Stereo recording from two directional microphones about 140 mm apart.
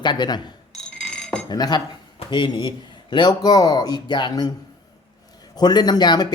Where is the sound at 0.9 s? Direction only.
5° left (ahead or behind).